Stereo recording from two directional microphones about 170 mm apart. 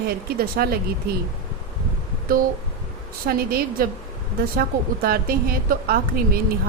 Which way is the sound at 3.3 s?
60° right (ahead or behind).